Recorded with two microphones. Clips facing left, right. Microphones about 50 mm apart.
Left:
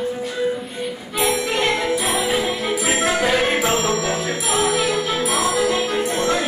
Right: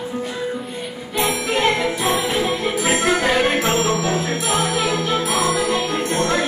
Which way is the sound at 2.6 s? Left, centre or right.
Centre.